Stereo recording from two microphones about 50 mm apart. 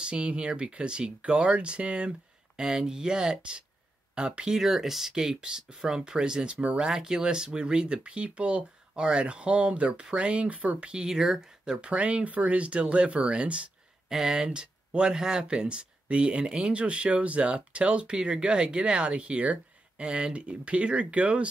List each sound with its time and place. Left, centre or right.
0.0 s speech: right
4.6 s speech: centre; by 6.9 s right
6.9 s speech: centre
11.6 s speech: centre
14.0 s speech: centre